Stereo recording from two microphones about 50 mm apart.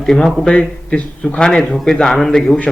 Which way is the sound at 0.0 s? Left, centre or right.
Centre.